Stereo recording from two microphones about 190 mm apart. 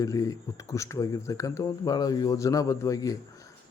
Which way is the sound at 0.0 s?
15° left (ahead or behind).